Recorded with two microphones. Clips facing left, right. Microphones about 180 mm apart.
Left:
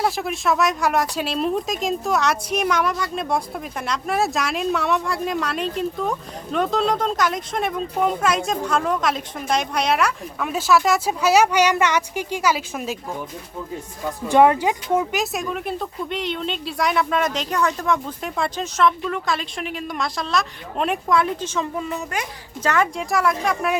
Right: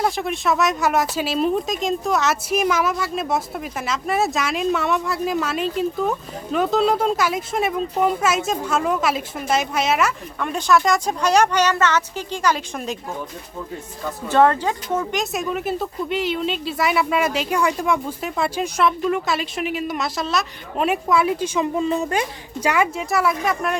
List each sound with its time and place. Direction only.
0.0 s speech: centre (ahead or behind)
14.0 s speech: 15° left (ahead or behind); by 21.7 s 10° right (ahead or behind)
21.8 s a child's voice: 30° right (ahead or behind)
22.6 s speech: 10° right (ahead or behind)